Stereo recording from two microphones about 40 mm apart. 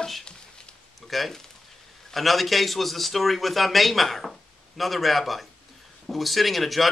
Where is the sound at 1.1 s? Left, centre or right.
Centre.